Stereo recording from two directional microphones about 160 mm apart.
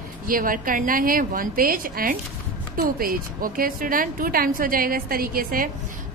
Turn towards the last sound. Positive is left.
turn(degrees=-65)  # may be behind; listen again after turning